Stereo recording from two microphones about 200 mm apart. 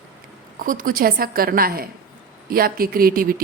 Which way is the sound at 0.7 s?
45° right (ahead or behind).